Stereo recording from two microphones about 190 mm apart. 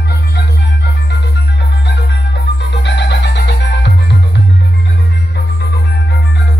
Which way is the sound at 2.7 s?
65° left (ahead or behind).